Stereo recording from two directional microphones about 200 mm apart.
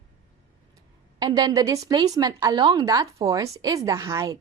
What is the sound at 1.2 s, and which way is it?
A woman's voice, 20° right (ahead or behind).